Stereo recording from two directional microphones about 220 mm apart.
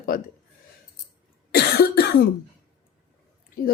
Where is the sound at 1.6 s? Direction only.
45° left (ahead or behind).